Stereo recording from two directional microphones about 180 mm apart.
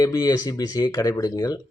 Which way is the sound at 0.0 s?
20° left (ahead or behind).